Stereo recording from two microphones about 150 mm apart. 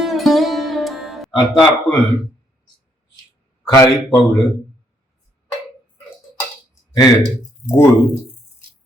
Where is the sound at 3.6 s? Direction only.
15° left (ahead or behind).